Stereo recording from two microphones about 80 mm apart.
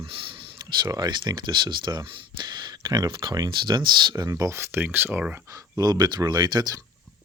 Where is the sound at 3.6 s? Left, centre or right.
Right.